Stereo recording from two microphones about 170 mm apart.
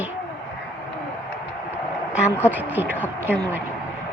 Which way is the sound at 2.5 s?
10° right (ahead or behind).